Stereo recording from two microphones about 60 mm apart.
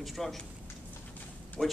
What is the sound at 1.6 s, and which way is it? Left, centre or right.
Speech, centre.